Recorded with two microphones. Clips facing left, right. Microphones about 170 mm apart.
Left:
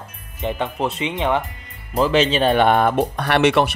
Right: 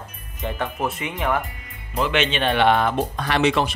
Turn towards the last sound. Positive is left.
turn(degrees=65)  # may be behind; listen again after turning